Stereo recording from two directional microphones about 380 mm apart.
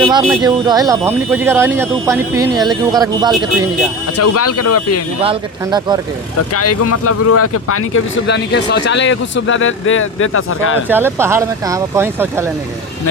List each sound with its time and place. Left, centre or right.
0.0 s speech: centre
4.2 s speech: left
5.2 s speech: centre
6.5 s speech: left
10.8 s speech: centre